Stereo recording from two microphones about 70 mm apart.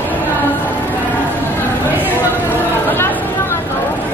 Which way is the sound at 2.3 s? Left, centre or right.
Left.